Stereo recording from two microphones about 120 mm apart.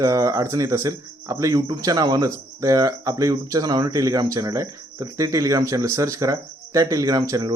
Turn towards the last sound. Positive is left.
turn(degrees=-35)  # may be behind; listen again after turning